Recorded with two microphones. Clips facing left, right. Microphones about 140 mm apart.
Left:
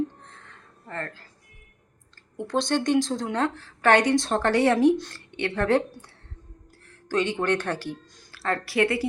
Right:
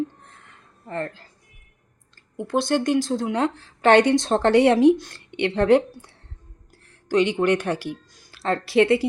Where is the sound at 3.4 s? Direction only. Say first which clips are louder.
Right 2 dB; 15° right (ahead or behind).